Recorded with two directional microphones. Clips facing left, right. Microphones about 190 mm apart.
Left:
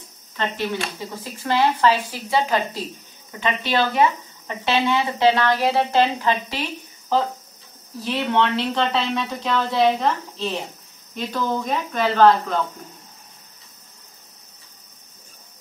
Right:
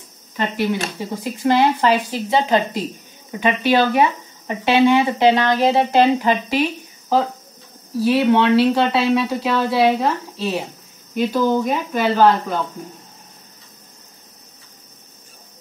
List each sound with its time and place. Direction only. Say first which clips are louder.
0.4 s speech: right 4 dB; 10° right (ahead or behind)